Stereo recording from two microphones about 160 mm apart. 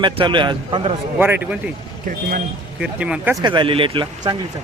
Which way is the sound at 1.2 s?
10° right (ahead or behind).